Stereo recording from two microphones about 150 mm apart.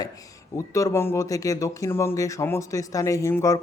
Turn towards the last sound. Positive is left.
turn(degrees=20)  # may be behind; listen again after turning